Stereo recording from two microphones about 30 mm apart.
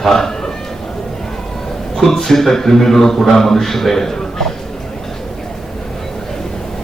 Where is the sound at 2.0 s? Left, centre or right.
Centre.